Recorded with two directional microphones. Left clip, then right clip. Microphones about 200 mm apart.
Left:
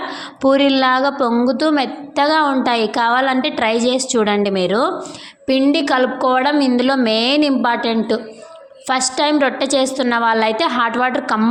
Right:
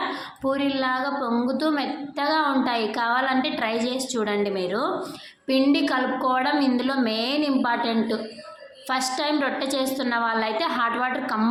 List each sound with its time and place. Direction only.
0.1 s a woman's voice: 40° left (ahead or behind)